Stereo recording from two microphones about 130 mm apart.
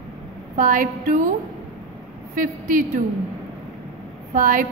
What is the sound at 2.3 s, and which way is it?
Speech, 90° right.